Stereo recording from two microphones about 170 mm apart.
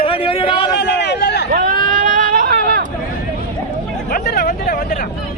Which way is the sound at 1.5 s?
55° right (ahead or behind).